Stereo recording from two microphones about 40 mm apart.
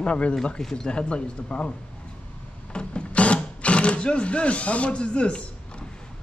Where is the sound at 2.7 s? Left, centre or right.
Left.